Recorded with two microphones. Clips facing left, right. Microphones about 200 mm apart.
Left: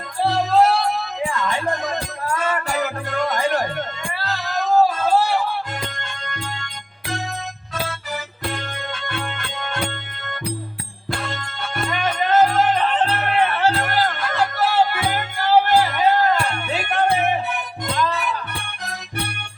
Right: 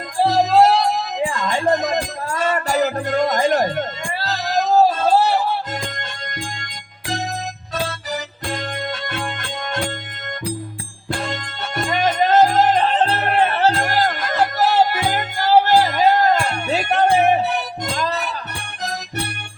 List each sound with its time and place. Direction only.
0.3 s music: 35° right (ahead or behind)
9.0 s music: 40° right (ahead or behind)
11.9 s music: 35° right (ahead or behind)